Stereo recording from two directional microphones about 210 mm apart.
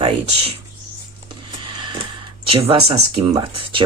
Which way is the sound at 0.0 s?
30° right (ahead or behind).